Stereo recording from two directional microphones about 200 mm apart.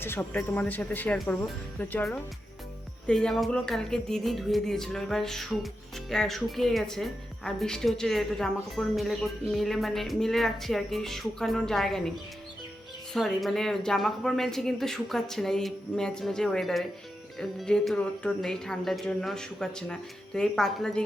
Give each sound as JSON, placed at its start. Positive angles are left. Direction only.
{"t": 0.0, "sound": "speech", "side_deg": 10}
{"t": 13.1, "sound": "speech", "side_deg": 0}